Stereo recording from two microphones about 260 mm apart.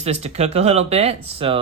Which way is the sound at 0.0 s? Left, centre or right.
Right.